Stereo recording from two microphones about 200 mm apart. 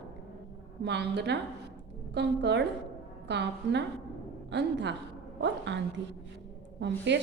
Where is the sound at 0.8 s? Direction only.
60° right (ahead or behind).